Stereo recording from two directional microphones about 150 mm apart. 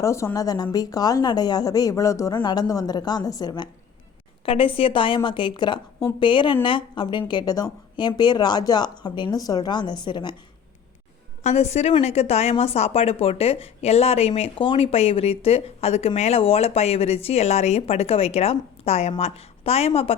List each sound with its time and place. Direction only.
0.0 s a woman's voice: 20° left (ahead or behind)
11.4 s a woman's voice: 45° left (ahead or behind)